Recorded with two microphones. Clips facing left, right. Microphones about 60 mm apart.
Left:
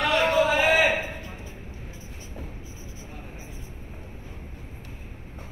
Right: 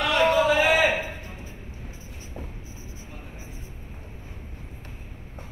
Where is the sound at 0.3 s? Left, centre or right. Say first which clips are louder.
Right 1 dB; left.